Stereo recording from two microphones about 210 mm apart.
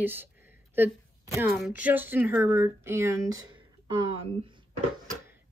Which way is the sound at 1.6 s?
5° right (ahead or behind).